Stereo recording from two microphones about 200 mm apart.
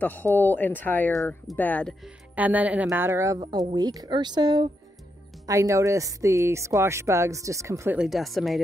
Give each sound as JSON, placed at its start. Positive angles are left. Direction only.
{"t": 0.0, "sound": "speech", "side_deg": 10}
{"t": 2.3, "sound": "speech", "side_deg": -10}